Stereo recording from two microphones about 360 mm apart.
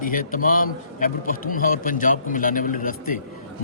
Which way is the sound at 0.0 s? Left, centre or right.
Left.